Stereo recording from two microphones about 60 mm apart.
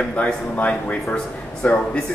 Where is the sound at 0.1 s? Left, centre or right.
Left.